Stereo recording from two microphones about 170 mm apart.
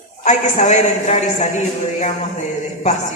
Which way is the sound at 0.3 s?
45° left (ahead or behind).